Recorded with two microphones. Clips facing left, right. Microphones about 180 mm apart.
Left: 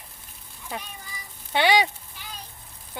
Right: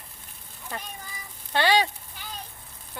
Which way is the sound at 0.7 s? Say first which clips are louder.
Left 1 dB; 15° left (ahead or behind).